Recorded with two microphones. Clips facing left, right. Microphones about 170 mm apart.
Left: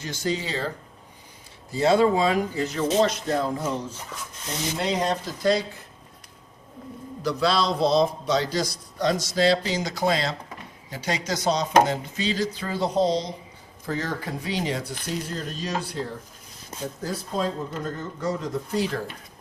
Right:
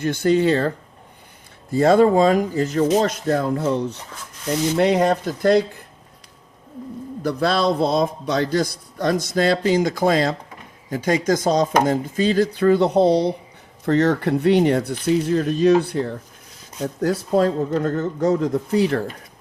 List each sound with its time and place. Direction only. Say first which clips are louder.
0.0 s speech: right 11 dB; 60° right (ahead or behind)
1.7 s a man's voice: right 5 dB; 50° right (ahead or behind)
7.2 s a man's voice: right 3 dB; 55° right (ahead or behind)
17.0 s speech: right 10 dB; 65° right (ahead or behind)